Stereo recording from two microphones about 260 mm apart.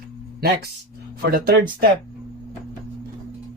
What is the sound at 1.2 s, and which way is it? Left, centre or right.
Speech, right.